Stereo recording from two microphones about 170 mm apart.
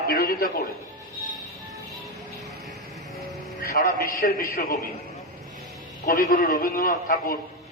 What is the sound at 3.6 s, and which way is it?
A man's voice, 60° left (ahead or behind).